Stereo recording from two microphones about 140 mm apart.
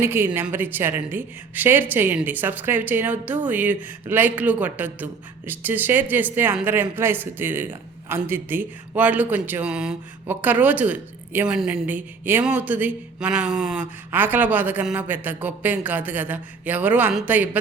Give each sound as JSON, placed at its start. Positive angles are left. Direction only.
{"t": 0.0, "sound": "speech", "side_deg": -15}